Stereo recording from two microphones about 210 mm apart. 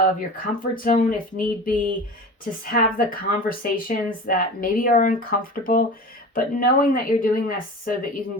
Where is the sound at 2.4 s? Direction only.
45° left (ahead or behind).